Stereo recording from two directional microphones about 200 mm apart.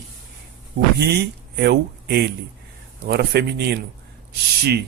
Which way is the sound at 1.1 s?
55° right (ahead or behind).